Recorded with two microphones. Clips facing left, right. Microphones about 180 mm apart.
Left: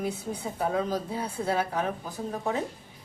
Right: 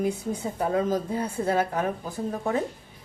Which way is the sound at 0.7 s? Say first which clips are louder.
Right 4 dB; 50° right (ahead or behind).